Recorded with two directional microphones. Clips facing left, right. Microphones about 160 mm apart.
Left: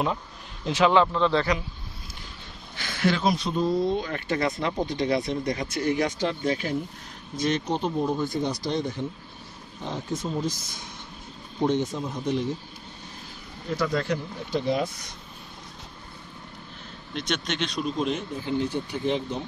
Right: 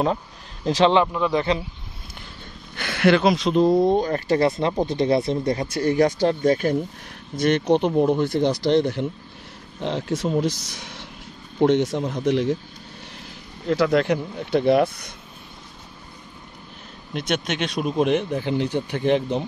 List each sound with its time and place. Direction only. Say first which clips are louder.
0.7 s speech: right 4 dB; 35° right (ahead or behind)
1.0 s a man's voice: right 1 dB; 10° right (ahead or behind)
2.7 s speech: right 7 dB; 65° right (ahead or behind); by 6.8 s 45° right (ahead or behind)
7.3 s speech: right 7 dB; 65° right (ahead or behind); by 12.5 s 85° right
13.7 s speech: right 7 dB; 70° right (ahead or behind)
17.3 s speech: right 4 dB; 55° right (ahead or behind)